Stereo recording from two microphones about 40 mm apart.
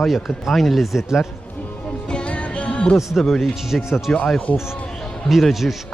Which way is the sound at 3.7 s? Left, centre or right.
Left.